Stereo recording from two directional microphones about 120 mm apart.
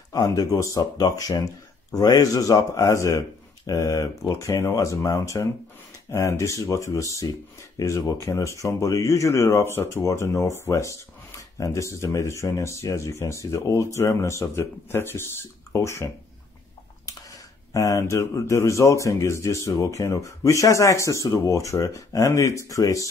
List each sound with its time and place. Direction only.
0.1 s speech: 30° left (ahead or behind)
17.7 s speech: 25° left (ahead or behind)